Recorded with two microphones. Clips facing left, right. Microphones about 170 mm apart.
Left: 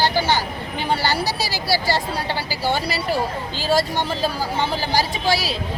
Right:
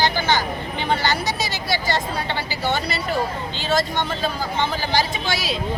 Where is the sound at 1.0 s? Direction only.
35° left (ahead or behind).